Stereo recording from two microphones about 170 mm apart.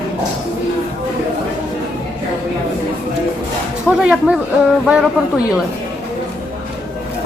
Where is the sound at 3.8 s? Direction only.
5° right (ahead or behind).